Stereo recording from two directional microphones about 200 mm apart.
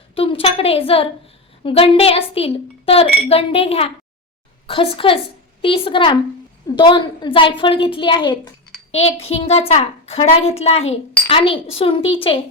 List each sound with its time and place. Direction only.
0.1 s a child's voice: 25° left (ahead or behind)